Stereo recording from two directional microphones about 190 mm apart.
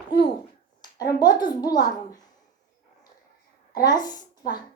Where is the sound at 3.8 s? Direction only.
20° left (ahead or behind).